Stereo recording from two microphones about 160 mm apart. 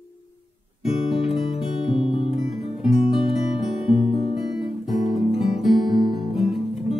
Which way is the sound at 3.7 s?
35° left (ahead or behind).